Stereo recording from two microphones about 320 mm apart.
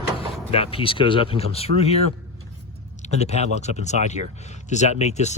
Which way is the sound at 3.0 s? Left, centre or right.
Centre.